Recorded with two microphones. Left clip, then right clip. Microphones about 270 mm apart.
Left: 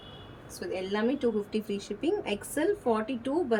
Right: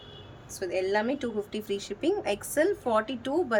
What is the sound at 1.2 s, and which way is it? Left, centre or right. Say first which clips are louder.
Speech: left 3 dB; right.